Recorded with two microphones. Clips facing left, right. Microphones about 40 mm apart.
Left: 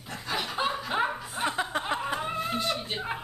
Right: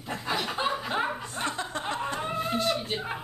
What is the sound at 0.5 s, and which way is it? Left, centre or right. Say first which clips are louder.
Chuckle: even; centre.